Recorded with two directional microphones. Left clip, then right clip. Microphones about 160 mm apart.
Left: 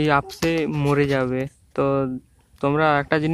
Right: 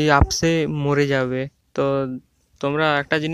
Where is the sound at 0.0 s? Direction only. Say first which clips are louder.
Right 3 dB; 40° right (ahead or behind).